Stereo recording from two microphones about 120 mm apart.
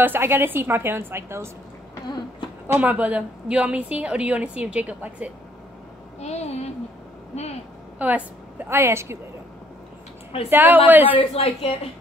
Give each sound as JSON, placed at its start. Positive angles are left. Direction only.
{"t": 0.0, "sound": "a woman's voice", "side_deg": -20}
{"t": 2.6, "sound": "a woman's voice", "side_deg": -15}
{"t": 6.1, "sound": "a child's voice", "side_deg": 65}
{"t": 8.0, "sound": "a woman's voice", "side_deg": -10}
{"t": 10.5, "sound": "a woman's voice", "side_deg": -15}
{"t": 11.1, "sound": "a child's voice", "side_deg": 55}